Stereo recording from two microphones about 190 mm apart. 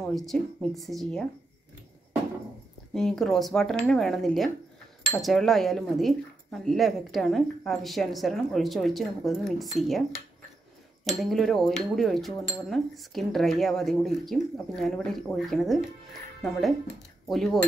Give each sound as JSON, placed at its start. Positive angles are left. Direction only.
{"t": 0.0, "sound": "speech", "side_deg": 0}
{"t": 2.9, "sound": "speech", "side_deg": 0}